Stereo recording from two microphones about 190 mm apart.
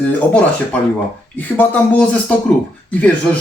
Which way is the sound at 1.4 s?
10° left (ahead or behind).